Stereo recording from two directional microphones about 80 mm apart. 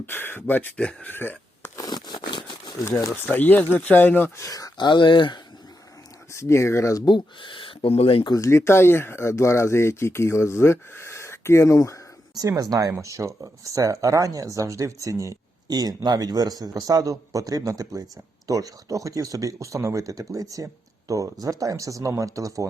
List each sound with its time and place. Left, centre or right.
0.0 s speech: left
1.1 s a sound: left
1.7 s crumpling: left
3.2 s speech: left
4.4 s speech: left
4.9 s speech: left
6.3 s speech: left
7.0 s speech: left
8.4 s speech: left
12.4 s speech: right
13.0 s speech: right
15.6 s speech: right